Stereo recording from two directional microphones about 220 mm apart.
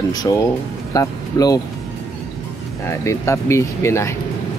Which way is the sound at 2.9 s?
15° left (ahead or behind).